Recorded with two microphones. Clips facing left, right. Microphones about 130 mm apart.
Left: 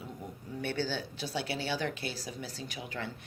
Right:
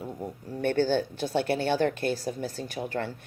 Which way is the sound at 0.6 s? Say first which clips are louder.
Right 10 dB; 50° right (ahead or behind).